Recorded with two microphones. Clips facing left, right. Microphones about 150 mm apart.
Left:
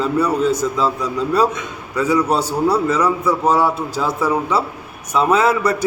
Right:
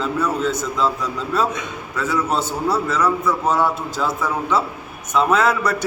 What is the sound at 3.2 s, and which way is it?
Speech, 35° left (ahead or behind).